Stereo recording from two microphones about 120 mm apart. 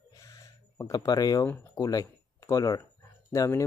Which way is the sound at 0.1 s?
25° left (ahead or behind).